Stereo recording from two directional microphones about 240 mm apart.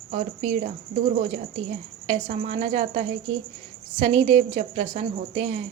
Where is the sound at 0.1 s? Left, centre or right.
Right.